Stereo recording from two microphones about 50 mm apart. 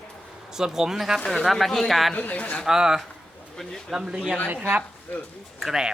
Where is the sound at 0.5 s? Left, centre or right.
Centre.